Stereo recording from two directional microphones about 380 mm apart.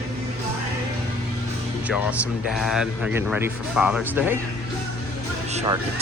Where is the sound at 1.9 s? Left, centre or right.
Centre.